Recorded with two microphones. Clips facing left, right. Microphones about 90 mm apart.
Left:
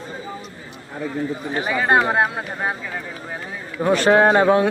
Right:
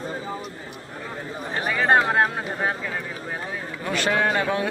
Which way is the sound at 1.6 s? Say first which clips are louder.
Left 1 dB; 5° left (ahead or behind).